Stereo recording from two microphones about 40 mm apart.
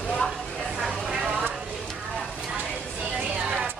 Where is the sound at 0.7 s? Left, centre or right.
Centre.